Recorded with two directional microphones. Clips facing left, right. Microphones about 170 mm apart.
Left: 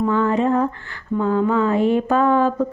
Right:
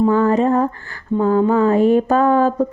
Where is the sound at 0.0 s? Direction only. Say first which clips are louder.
Right 4 dB; 40° right (ahead or behind).